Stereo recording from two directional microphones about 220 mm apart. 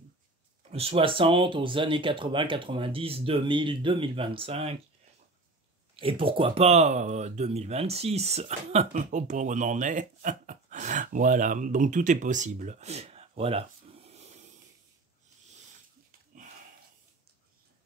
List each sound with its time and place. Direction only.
0.7 s speech: 25° right (ahead or behind)
5.9 s speech: 25° right (ahead or behind)